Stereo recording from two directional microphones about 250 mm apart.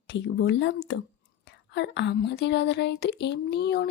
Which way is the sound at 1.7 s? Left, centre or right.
Left.